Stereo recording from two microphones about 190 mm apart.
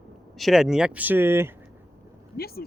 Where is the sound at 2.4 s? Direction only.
55° left (ahead or behind).